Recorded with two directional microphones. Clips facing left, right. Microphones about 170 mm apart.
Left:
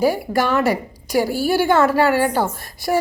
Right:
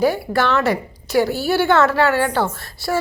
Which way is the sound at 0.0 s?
10° left (ahead or behind).